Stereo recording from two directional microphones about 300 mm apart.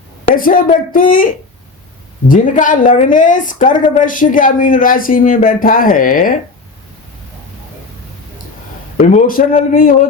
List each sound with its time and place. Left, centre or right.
0.3 s a woman's voice: left
9.0 s a woman's voice: left